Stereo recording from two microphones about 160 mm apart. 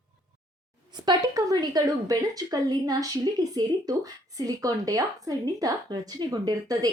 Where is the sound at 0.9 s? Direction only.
25° right (ahead or behind).